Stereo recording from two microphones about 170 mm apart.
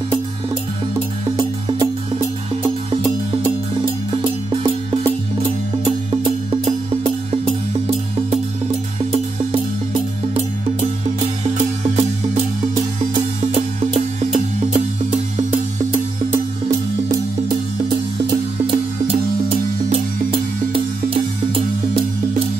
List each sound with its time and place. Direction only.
1.3 s music: 25° right (ahead or behind)
4.1 s music: 30° right (ahead or behind)
9.1 s music: 35° right (ahead or behind)
11.4 s music: 40° right (ahead or behind)
18.2 s music: 35° right (ahead or behind)